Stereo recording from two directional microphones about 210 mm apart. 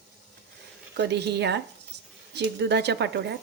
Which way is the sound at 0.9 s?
55° right (ahead or behind).